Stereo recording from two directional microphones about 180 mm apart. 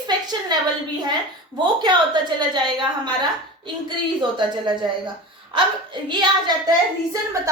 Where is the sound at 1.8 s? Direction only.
25° right (ahead or behind).